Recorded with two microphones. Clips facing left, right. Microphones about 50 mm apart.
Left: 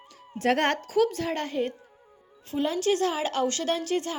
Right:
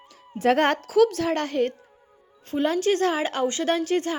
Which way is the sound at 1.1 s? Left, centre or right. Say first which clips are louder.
Right 4 dB; right.